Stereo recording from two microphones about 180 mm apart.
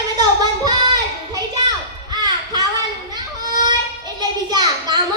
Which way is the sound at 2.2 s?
25° right (ahead or behind).